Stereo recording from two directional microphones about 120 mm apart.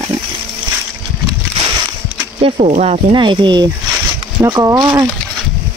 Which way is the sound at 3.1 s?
40° right (ahead or behind).